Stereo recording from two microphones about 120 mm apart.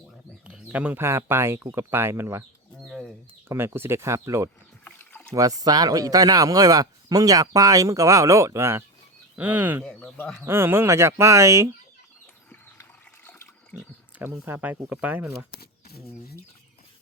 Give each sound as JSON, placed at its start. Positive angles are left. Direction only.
{"t": 0.4, "sound": "speech", "side_deg": -10}
{"t": 2.8, "sound": "chicken", "side_deg": 5}
{"t": 3.5, "sound": "speech", "side_deg": -20}
{"t": 4.9, "sound": "rowboat", "side_deg": 15}
{"t": 5.3, "sound": "speech", "side_deg": -30}
{"t": 9.8, "sound": "speech", "side_deg": 15}
{"t": 10.4, "sound": "speech", "side_deg": -20}
{"t": 13.7, "sound": "speech", "side_deg": -15}